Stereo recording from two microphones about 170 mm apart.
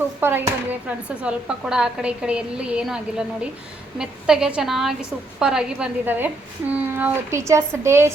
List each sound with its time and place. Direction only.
0.2 s a woman's voice: 10° right (ahead or behind)